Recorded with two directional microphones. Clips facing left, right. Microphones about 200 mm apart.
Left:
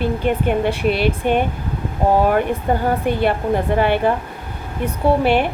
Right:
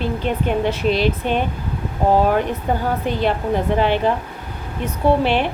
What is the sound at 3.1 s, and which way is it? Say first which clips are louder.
Speech: left 1 dB; 55° left (ahead or behind).